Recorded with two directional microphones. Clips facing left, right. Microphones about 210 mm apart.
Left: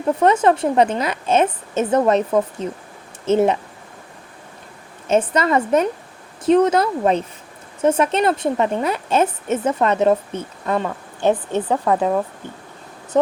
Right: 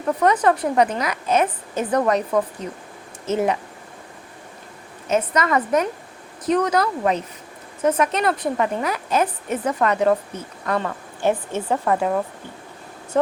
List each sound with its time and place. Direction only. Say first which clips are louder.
0.2 s speech: left 2 dB; 25° left (ahead or behind)
5.0 s speech: left 3 dB; 30° left (ahead or behind)